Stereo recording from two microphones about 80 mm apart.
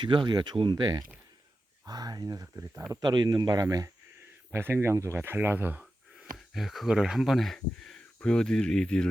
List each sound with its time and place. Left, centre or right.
0.1 s speech: right
0.8 s speech: right
2.9 s speech: right
4.5 s speech: right
5.8 s speech: centre